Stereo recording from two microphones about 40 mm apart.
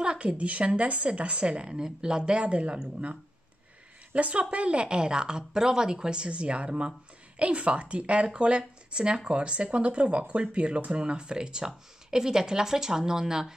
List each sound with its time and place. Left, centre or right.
0.0 s speech: right